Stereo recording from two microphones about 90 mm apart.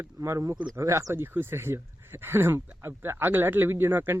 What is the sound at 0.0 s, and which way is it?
Speech, 35° right (ahead or behind).